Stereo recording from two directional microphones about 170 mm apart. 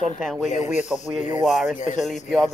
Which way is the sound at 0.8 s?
5° right (ahead or behind).